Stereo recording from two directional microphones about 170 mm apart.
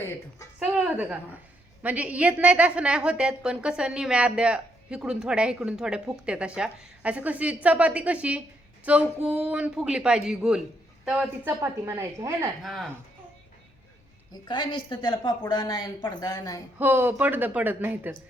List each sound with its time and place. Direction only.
0.6 s a woman's voice: 10° right (ahead or behind)
12.6 s speech: centre (ahead or behind)
14.3 s a woman's voice: 25° left (ahead or behind)
16.7 s a woman's voice: 10° right (ahead or behind)